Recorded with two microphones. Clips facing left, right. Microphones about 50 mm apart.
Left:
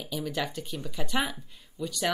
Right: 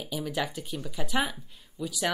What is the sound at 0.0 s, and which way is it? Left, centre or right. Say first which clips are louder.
Speech: right 1 dB; centre.